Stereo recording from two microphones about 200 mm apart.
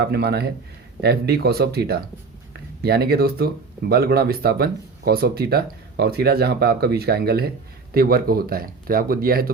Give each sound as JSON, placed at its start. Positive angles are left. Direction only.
{"t": 0.0, "sound": "speech", "side_deg": -55}